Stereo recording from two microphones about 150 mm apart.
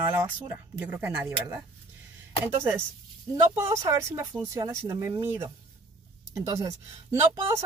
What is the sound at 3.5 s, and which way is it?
Speech, 20° right (ahead or behind).